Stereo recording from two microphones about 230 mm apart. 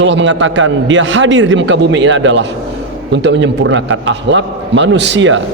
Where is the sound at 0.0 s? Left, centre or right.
Right.